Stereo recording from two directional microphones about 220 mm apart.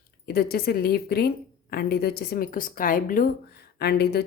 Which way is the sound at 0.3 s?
45° left (ahead or behind).